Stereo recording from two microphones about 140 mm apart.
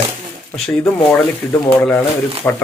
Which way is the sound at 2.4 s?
15° left (ahead or behind).